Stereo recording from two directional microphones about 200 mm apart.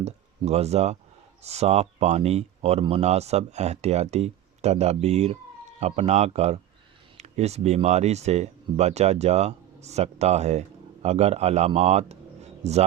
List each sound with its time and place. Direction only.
0.0 s speech: 35° right (ahead or behind)